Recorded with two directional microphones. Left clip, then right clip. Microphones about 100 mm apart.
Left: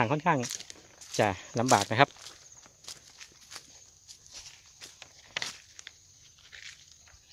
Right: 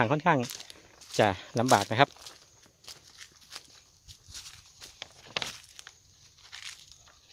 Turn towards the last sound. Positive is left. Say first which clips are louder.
# right 3 dB
turn(degrees=-60)  # may be behind; listen again after turning